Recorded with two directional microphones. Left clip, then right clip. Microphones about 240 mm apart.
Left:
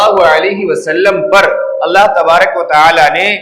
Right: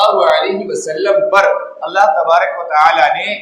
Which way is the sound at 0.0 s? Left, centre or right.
Left.